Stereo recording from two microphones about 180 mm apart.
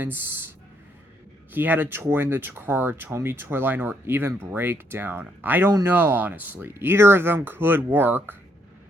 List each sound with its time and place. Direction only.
1.5 s speech: 10° right (ahead or behind)